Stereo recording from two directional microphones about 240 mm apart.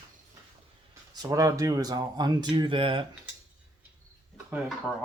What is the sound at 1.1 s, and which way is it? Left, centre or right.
Speech, centre.